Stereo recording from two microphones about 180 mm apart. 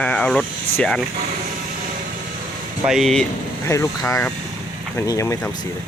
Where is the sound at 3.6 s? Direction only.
15° left (ahead or behind).